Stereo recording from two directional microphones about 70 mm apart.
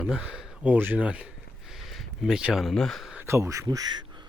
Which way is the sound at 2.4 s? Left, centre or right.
Centre.